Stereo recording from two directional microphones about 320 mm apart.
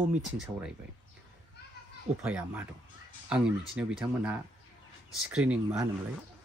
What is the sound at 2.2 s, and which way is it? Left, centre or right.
Speech, centre.